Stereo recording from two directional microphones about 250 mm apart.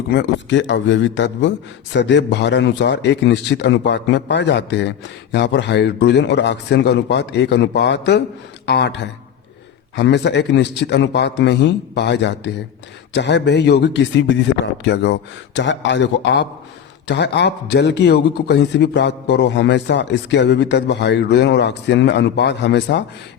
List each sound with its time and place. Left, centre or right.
0.1 s a man's voice: left